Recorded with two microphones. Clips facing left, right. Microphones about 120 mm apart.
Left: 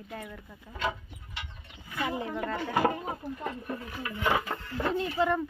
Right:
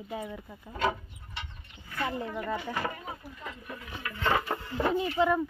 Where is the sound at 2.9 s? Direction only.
40° left (ahead or behind).